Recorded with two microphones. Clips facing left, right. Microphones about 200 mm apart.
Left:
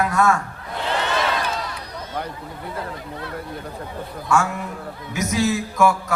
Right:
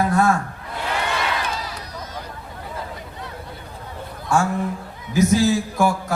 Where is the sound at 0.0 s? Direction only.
30° right (ahead or behind).